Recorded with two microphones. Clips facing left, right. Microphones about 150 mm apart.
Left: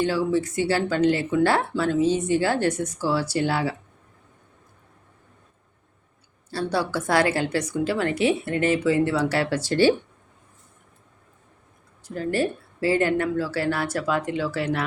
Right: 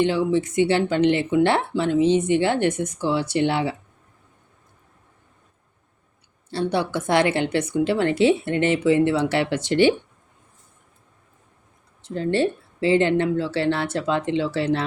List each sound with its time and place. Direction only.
0.0 s speech: 20° right (ahead or behind)
6.5 s speech: 20° right (ahead or behind)
12.0 s speech: 25° right (ahead or behind)